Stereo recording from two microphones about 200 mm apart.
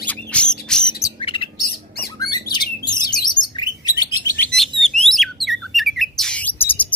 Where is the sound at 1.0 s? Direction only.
25° left (ahead or behind).